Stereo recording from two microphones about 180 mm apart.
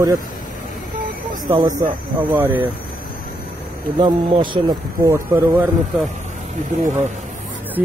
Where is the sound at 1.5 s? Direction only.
20° right (ahead or behind).